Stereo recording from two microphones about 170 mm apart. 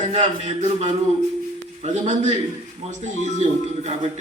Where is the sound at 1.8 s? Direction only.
45° right (ahead or behind).